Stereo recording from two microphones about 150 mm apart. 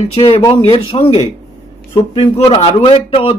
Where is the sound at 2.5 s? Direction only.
45° left (ahead or behind).